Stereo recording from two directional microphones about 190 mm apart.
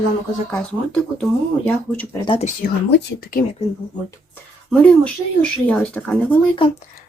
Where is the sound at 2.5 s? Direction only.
55° left (ahead or behind).